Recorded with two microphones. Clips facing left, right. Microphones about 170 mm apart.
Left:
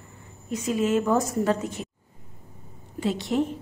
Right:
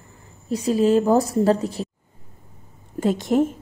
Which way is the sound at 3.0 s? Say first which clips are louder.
Right 6 dB; 45° right (ahead or behind).